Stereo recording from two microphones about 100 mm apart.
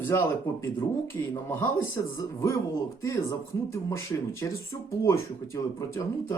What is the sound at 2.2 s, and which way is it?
Speech, 30° left (ahead or behind).